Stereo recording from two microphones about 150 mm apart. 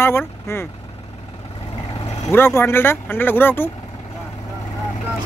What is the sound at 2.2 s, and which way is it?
Speech, 15° left (ahead or behind).